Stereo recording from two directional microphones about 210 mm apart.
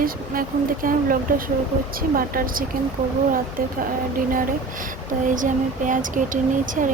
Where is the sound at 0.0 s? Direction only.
40° right (ahead or behind).